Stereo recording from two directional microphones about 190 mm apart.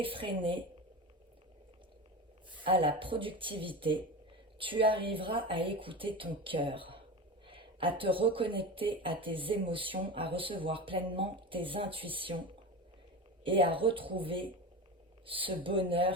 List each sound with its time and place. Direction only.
0.0 s speech: 25° right (ahead or behind)
2.6 s speech: 25° right (ahead or behind)